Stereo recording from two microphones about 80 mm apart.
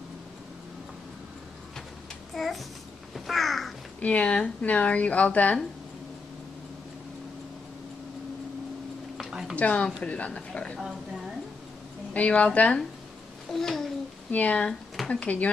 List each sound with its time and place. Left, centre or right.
2.3 s a child's voice: centre
3.3 s crow: centre
4.0 s speech: centre
9.1 s a sound: centre
9.6 s speech: centre
10.8 s a woman's voice: centre
12.1 s speech: centre
13.5 s a sound: centre
14.3 s speech: centre